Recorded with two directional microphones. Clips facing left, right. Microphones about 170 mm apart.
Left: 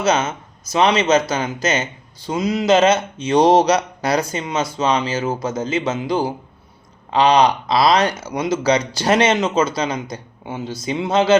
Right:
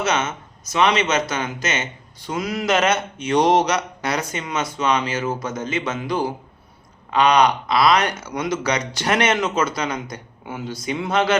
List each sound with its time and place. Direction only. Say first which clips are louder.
0.0 s speech: left 4 dB; 35° left (ahead or behind)
2.3 s speech: left 5 dB; 20° left (ahead or behind)